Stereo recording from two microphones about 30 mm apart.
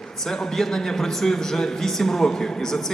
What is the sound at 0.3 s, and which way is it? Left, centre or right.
A man's voice, centre.